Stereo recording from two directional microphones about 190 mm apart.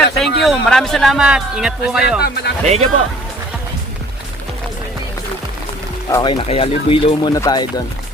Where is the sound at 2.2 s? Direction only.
55° left (ahead or behind).